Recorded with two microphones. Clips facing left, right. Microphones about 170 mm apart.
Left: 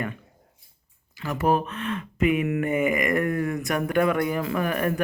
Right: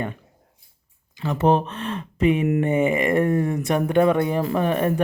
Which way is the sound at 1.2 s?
25° right (ahead or behind).